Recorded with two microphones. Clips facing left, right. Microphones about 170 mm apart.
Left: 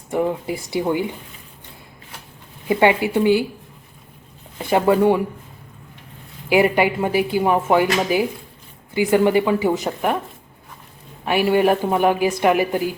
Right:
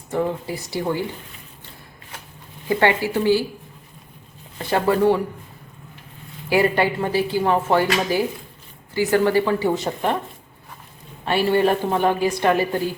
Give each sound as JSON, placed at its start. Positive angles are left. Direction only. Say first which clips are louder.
{"t": 0.1, "sound": "a woman's voice", "louder": "left 2 dB", "side_deg": 15}
{"t": 2.6, "sound": "a woman's voice", "louder": "left 3 dB", "side_deg": 15}
{"t": 4.5, "sound": "a woman's voice", "louder": "left 3 dB", "side_deg": 15}
{"t": 6.5, "sound": "a woman's voice", "louder": "left 2 dB", "side_deg": 15}
{"t": 11.3, "sound": "a woman's voice", "louder": "left 2 dB", "side_deg": 15}